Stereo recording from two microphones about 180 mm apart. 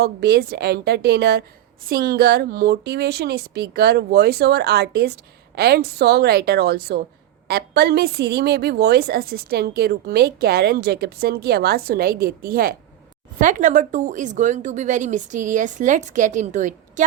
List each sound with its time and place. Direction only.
0.0 s a woman's voice: 65° right (ahead or behind); by 16.7 s 45° right (ahead or behind)